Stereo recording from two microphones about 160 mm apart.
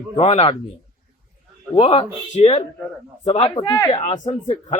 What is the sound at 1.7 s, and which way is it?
Speech, 35° left (ahead or behind).